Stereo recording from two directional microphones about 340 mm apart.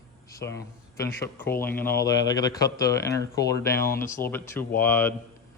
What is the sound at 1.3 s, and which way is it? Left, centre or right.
Speech, centre.